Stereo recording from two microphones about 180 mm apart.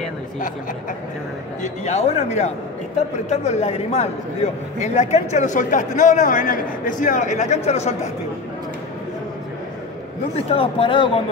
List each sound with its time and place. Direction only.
1.6 s a man's voice: 35° left (ahead or behind)
10.3 s speech: 30° left (ahead or behind)